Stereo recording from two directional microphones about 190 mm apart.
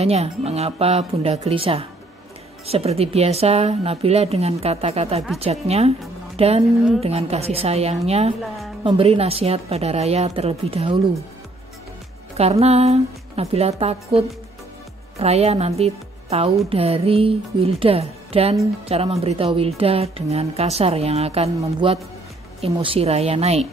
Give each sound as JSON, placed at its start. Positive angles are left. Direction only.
{"t": 0.0, "sound": "a woman's voice", "side_deg": -35}
{"t": 12.4, "sound": "a woman's voice", "side_deg": -35}
{"t": 21.5, "sound": "a woman's voice", "side_deg": -15}
{"t": 22.6, "sound": "a woman's voice", "side_deg": -30}